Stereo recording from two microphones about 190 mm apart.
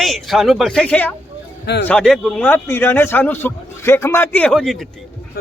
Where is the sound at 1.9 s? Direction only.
5° left (ahead or behind).